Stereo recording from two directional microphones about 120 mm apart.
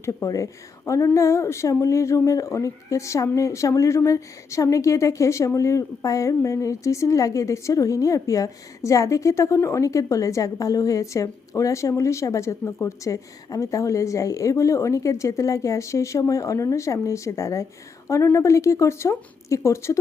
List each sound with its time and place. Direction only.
0.0 s a woman's voice: 25° left (ahead or behind)